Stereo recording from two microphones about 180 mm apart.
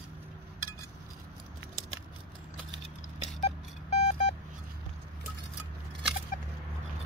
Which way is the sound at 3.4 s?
40° left (ahead or behind).